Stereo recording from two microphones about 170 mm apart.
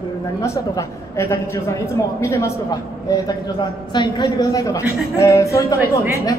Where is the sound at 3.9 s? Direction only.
25° left (ahead or behind).